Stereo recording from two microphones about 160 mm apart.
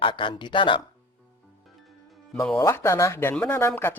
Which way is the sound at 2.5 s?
15° left (ahead or behind).